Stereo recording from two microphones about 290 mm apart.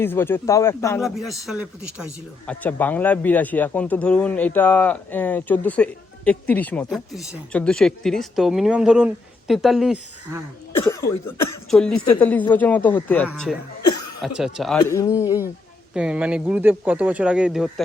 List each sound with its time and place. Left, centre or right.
0.0 s speech: centre
11.3 s speech: left
11.7 s speech: centre
13.8 s chuckle: left
14.2 s speech: centre
14.8 s speech: centre
16.0 s speech: centre